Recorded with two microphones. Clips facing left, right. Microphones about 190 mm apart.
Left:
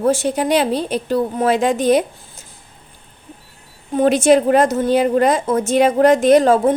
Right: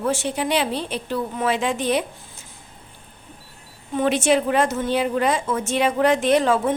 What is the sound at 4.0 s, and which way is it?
A woman's voice, 40° left (ahead or behind).